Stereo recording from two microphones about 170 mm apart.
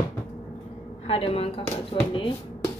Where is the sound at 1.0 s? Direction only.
35° left (ahead or behind).